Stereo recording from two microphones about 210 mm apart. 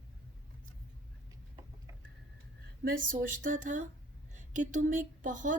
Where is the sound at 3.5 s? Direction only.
40° right (ahead or behind).